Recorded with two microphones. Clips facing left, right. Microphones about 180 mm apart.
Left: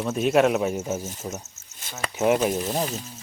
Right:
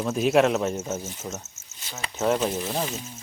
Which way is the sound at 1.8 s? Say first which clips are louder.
Left 4 dB; 50° left (ahead or behind).